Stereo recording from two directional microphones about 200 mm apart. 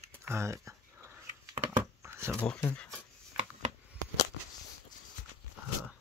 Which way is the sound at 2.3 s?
5° left (ahead or behind).